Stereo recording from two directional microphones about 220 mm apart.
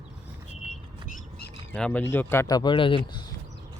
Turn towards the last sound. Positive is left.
turn(degrees=20)  # may be behind; listen again after turning